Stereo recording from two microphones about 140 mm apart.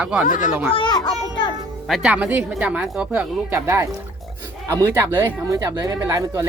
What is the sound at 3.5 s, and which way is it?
Speech, 20° right (ahead or behind).